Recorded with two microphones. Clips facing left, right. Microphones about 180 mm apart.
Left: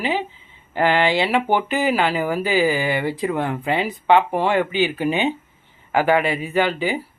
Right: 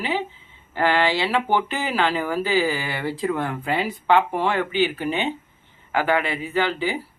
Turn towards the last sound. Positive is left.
turn(degrees=15)  # may be behind; listen again after turning